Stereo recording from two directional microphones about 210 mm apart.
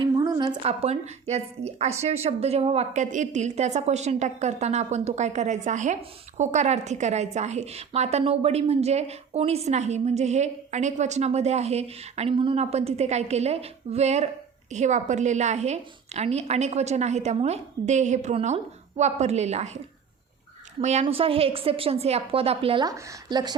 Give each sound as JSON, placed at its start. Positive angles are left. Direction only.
{"t": 0.0, "sound": "a woman's voice", "side_deg": -20}
{"t": 20.8, "sound": "a woman's voice", "side_deg": -30}